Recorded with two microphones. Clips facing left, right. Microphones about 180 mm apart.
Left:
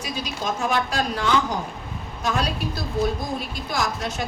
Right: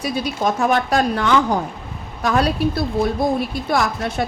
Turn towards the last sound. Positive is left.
turn(degrees=-60)  # may be behind; listen again after turning